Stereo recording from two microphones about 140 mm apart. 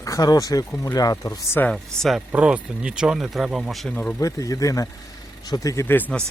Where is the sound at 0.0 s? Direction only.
25° left (ahead or behind).